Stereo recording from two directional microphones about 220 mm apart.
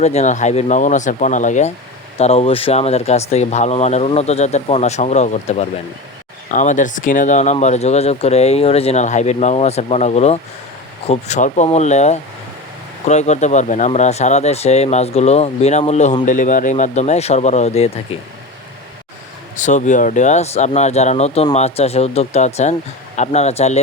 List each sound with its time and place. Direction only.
0.0 s speech: 30° left (ahead or behind)
19.5 s speech: 35° left (ahead or behind)